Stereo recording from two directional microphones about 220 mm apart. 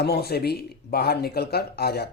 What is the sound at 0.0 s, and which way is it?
Speech, 45° left (ahead or behind).